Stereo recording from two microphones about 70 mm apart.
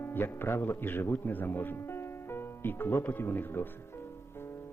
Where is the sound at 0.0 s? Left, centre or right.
Left.